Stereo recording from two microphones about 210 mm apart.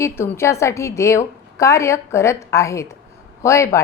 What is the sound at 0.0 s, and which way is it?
A woman's voice, 10° left (ahead or behind).